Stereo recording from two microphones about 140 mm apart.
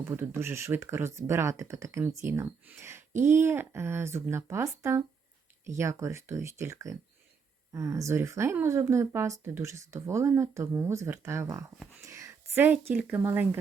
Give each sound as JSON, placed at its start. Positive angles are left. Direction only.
{"t": 0.0, "sound": "speech", "side_deg": -15}
{"t": 3.1, "sound": "speech", "side_deg": -60}
{"t": 3.3, "sound": "speech", "side_deg": -15}